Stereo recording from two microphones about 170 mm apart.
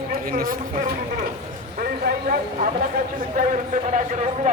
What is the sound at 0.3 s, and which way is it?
Speech, 55° right (ahead or behind).